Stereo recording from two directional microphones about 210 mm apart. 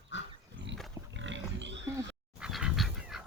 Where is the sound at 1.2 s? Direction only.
60° right (ahead or behind).